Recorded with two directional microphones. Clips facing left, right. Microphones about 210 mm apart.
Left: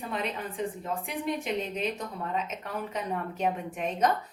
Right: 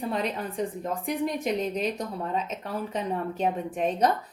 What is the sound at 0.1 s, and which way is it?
Speech, 40° right (ahead or behind).